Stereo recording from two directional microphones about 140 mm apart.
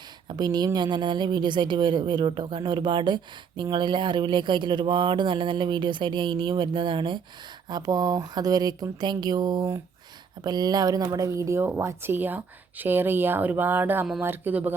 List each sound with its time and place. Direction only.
0.3 s speech: 30° right (ahead or behind); by 14.8 s 10° right (ahead or behind)